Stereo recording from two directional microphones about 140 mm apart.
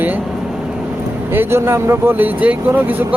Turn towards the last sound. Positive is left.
turn(degrees=-15)  # may be behind; listen again after turning